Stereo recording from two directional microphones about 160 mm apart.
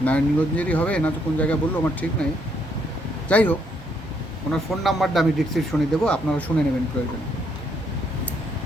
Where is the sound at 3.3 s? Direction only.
10° left (ahead or behind).